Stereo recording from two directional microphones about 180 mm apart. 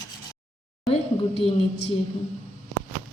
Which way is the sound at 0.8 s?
35° left (ahead or behind).